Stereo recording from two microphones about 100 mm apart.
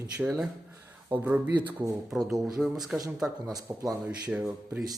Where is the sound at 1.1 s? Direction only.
20° right (ahead or behind).